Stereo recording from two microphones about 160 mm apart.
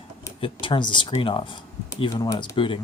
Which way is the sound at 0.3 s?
35° left (ahead or behind).